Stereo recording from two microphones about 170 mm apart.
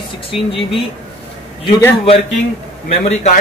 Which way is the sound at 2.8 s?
40° left (ahead or behind).